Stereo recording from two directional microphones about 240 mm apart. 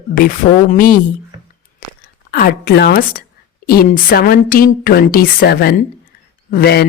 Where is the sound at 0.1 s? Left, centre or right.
Left.